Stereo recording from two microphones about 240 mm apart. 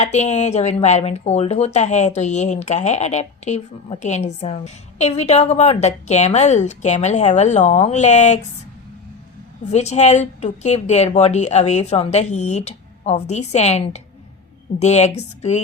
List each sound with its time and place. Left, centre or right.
0.0 s speech: left
9.7 s speech: left